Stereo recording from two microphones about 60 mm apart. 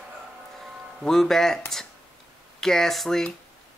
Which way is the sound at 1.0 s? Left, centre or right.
Centre.